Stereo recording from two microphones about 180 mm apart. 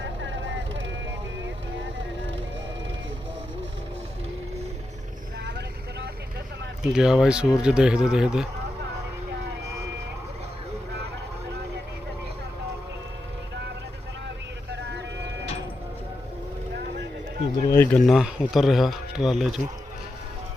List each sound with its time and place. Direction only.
0.0 s vehicle: 90° right
5.5 s vehicle: 65° right (ahead or behind)
6.8 s speech: 5° right (ahead or behind)
14.7 s vehicle: 70° right (ahead or behind)
17.7 s speech: 15° left (ahead or behind)
18.0 s speech: centre (ahead or behind)